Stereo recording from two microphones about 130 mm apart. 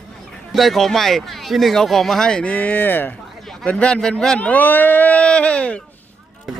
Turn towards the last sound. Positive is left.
turn(degrees=10)  # may be behind; listen again after turning